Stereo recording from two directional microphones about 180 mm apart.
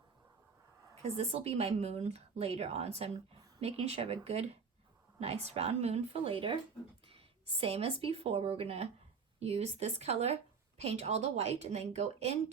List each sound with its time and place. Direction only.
1.0 s a woman's voice: 35° right (ahead or behind)